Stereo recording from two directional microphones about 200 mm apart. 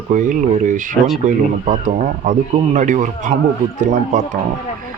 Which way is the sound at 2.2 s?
35° right (ahead or behind).